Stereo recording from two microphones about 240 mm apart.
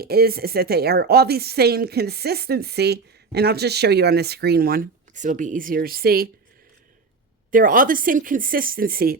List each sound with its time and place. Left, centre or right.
0.0 s a woman's voice: right
7.5 s a woman's voice: right